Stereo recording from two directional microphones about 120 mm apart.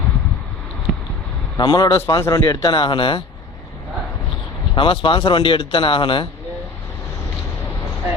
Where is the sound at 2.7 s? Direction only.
45° left (ahead or behind).